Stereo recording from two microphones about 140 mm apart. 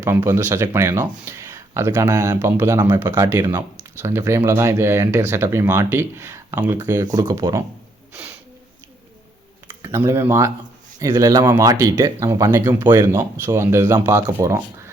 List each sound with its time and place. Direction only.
0.2 s speech: 20° right (ahead or behind)
3.3 s speech: 25° right (ahead or behind)
9.8 s speech: 20° right (ahead or behind)